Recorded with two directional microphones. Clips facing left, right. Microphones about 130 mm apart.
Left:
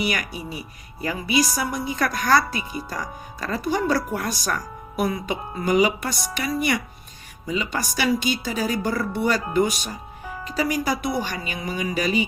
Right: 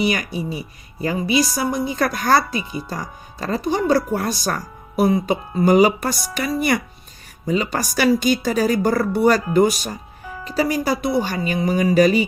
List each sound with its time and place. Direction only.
0.0 s a woman's voice: 25° right (ahead or behind)